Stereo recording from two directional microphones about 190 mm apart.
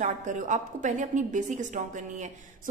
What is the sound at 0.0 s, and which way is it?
A woman's voice, 40° right (ahead or behind).